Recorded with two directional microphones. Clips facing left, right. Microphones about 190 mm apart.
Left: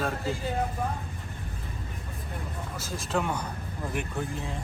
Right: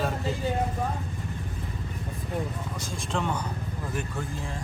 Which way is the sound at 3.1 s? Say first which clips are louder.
Left 1 dB; 5° left (ahead or behind).